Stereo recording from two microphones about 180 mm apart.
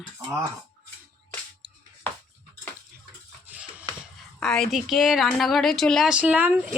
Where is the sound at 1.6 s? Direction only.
25° right (ahead or behind).